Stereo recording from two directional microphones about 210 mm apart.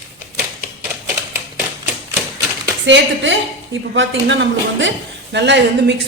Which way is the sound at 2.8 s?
60° right (ahead or behind).